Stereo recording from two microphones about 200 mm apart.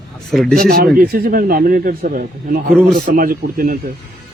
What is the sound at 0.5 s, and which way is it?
A man's voice, 50° right (ahead or behind).